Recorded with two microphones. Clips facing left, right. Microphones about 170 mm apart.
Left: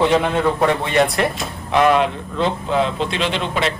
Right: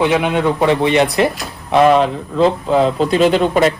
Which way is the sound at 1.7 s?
35° right (ahead or behind).